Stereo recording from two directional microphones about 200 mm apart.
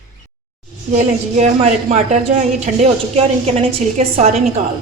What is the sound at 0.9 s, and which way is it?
A woman's voice, 35° right (ahead or behind).